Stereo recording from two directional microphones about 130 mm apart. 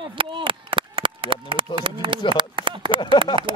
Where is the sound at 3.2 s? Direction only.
40° right (ahead or behind).